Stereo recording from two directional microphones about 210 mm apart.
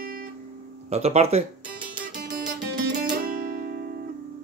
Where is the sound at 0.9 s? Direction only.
30° right (ahead or behind).